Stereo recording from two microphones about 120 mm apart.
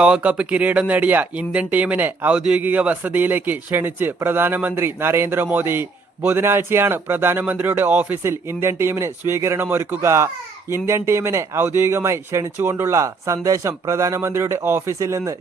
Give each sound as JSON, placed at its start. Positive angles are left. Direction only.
{"t": 0.0, "sound": "speech", "side_deg": -10}